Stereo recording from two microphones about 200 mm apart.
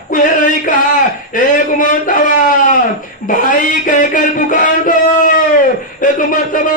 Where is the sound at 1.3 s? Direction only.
45° left (ahead or behind).